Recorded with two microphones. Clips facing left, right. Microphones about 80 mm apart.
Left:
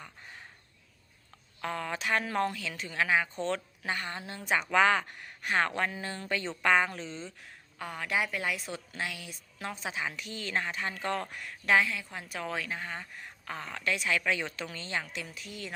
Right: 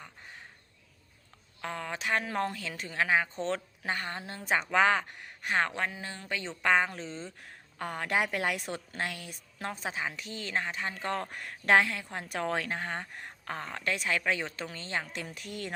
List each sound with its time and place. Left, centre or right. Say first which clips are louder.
1.6 s a woman's voice: left 1 dB; centre
2.5 s a woman's voice: even; right
7.8 s a woman's voice: right 2 dB; right
15.1 s a woman's voice: right 2 dB; right